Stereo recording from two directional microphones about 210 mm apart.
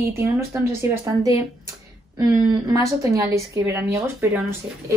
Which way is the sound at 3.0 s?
15° right (ahead or behind).